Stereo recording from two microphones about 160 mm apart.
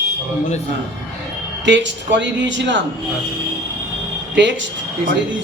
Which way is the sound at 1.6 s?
90° right.